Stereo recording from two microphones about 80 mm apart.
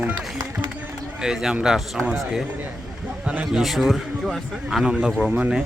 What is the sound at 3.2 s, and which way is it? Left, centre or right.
Speech, centre.